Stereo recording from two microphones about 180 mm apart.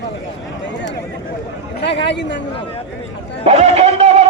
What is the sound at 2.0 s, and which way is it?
Speech, 75° left (ahead or behind).